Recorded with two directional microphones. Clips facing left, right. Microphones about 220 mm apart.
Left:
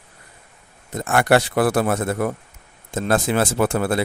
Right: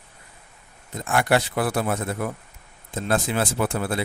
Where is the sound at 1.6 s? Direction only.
85° left.